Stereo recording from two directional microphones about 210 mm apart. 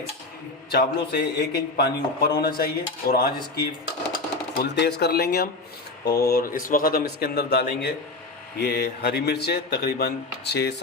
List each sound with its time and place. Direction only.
0.7 s speech: 50° left (ahead or behind)